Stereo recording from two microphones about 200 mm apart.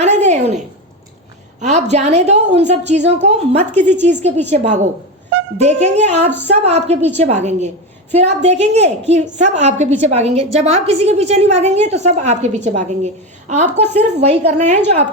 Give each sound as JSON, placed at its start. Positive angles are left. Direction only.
{"t": 0.0, "sound": "a woman's voice", "side_deg": -35}
{"t": 1.6, "sound": "a woman's voice", "side_deg": -35}